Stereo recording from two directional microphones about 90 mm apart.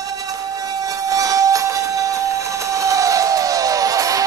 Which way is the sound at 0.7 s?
40° right (ahead or behind).